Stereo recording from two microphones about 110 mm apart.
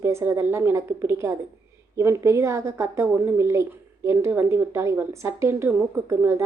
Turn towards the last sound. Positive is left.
turn(degrees=-25)  # may be behind; listen again after turning